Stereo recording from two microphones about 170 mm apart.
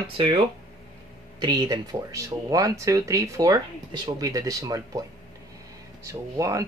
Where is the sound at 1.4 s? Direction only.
25° right (ahead or behind).